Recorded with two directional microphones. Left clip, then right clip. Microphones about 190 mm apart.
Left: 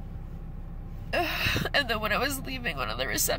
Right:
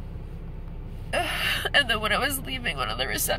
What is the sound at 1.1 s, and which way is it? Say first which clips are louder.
Speech: right 2 dB; 15° left (ahead or behind).